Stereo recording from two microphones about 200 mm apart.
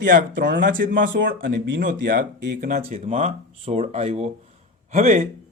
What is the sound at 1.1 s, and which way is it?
Speech, 65° right (ahead or behind).